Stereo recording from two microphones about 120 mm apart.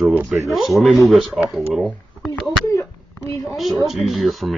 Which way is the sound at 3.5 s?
Centre (ahead or behind).